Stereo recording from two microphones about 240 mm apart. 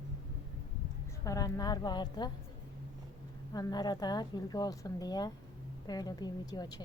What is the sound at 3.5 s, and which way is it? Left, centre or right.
A woman's voice, centre.